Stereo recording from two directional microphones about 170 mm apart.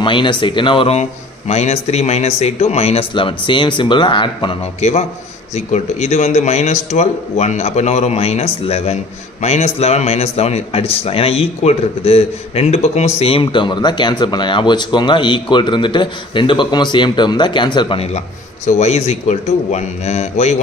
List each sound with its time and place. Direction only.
0.0 s a man's voice: 30° left (ahead or behind)